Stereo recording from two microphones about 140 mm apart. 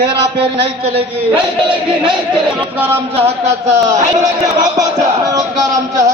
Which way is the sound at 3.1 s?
50° right (ahead or behind).